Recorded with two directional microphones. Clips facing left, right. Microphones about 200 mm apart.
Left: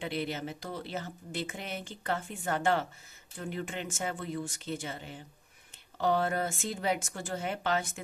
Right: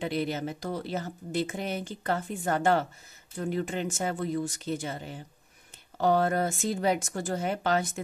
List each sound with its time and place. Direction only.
0.0 s speech: 40° right (ahead or behind)